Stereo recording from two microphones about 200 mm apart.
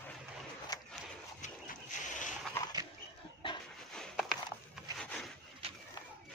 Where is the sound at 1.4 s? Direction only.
40° left (ahead or behind).